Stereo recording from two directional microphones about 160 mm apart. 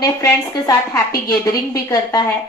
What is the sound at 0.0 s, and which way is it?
A woman's voice, 20° left (ahead or behind).